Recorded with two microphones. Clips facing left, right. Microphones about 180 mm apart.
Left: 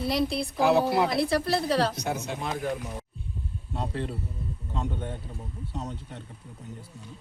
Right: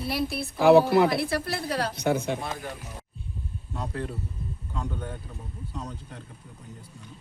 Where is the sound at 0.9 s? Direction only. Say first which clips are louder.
Right 2 dB; 60° right (ahead or behind).